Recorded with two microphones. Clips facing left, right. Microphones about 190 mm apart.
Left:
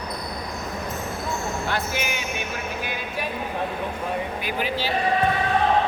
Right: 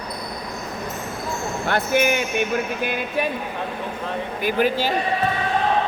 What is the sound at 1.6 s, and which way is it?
Speech, 55° right (ahead or behind).